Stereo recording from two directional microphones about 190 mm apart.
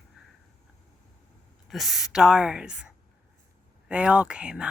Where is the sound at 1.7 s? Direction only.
Centre (ahead or behind).